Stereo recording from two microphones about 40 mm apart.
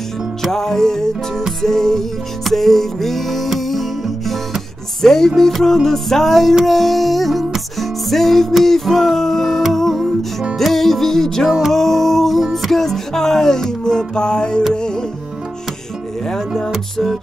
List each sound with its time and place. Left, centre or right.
0.5 s music: centre
16.3 s music: centre